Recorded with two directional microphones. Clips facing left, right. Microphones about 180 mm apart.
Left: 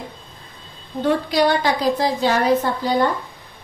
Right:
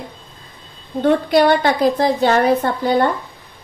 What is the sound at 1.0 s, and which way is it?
A woman's voice, 60° right (ahead or behind).